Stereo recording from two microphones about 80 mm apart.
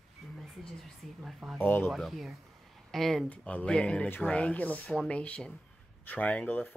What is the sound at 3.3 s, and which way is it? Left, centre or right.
Speech, centre.